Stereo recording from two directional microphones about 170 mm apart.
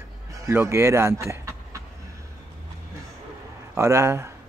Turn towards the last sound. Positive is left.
turn(degrees=-15)  # may be behind; listen again after turning